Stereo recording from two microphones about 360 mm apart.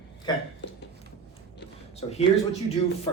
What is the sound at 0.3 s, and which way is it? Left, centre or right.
Speech, centre.